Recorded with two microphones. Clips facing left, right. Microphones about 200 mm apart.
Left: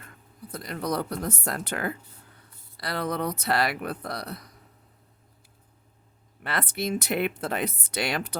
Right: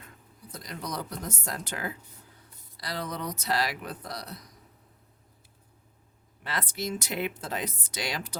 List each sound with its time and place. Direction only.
0.5 s speech: 60° left (ahead or behind)
6.4 s speech: 60° left (ahead or behind)